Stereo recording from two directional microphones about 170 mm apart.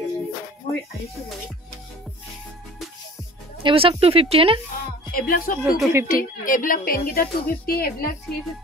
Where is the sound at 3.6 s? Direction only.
30° right (ahead or behind).